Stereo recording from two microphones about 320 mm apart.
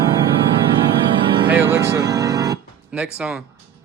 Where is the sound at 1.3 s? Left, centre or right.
Centre.